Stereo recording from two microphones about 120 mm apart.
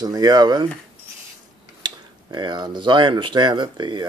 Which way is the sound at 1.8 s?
40° right (ahead or behind).